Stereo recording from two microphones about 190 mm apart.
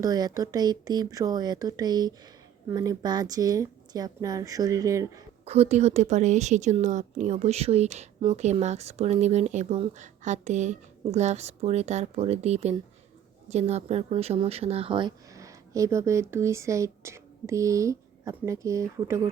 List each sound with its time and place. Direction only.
0.0 s a woman's voice: 20° right (ahead or behind)
5.5 s a woman's voice: 35° right (ahead or behind); by 19.3 s 15° right (ahead or behind)